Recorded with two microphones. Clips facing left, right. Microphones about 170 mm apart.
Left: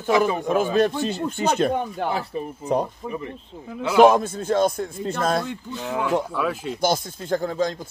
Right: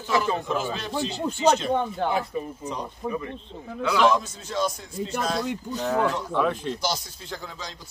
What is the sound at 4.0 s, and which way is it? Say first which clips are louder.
Speech: left 8 dB; 55° left (ahead or behind).